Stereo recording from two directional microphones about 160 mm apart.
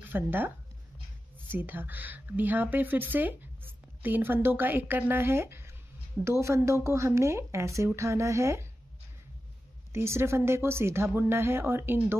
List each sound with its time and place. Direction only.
0.1 s speech: 10° right (ahead or behind)
1.5 s speech: 10° right (ahead or behind)
9.9 s speech: 15° right (ahead or behind)